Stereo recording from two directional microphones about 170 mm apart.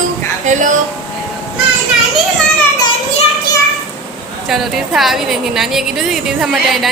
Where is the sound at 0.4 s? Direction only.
45° right (ahead or behind).